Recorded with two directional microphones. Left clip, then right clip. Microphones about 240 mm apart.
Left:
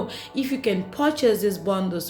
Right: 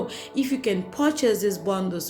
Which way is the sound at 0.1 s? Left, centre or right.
Centre.